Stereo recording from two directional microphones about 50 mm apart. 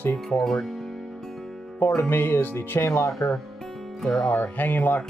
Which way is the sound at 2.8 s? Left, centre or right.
Left.